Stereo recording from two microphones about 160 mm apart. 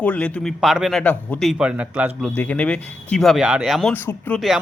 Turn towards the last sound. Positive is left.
turn(degrees=10)  # may be behind; listen again after turning